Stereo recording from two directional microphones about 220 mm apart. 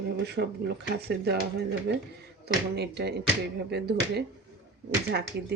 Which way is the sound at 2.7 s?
50° right (ahead or behind).